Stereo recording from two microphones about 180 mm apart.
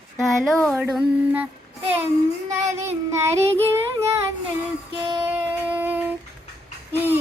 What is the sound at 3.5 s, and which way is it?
Child singing, 15° right (ahead or behind).